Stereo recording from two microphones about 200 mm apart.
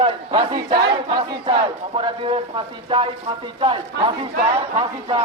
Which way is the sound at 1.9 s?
25° right (ahead or behind).